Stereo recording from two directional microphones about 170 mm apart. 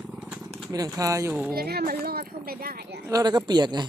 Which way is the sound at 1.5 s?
65° right (ahead or behind).